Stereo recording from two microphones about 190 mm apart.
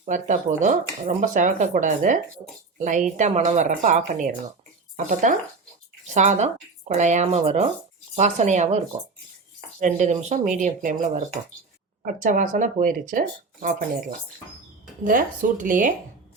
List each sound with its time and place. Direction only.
0.0 s speech: 40° right (ahead or behind)
9.8 s speech: 40° right (ahead or behind)
15.0 s speech: 45° right (ahead or behind)